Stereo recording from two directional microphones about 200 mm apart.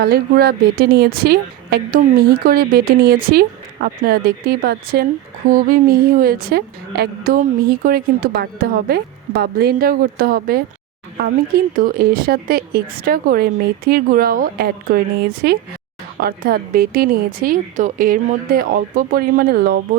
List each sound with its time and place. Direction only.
0.0 s a woman's voice: 50° right (ahead or behind)